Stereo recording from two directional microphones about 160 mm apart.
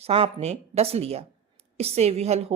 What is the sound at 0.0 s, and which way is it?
A woman's voice, 40° right (ahead or behind).